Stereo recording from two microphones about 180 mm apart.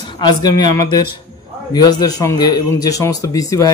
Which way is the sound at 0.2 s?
25° left (ahead or behind).